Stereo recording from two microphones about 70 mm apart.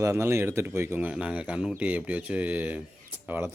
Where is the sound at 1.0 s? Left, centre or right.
Centre.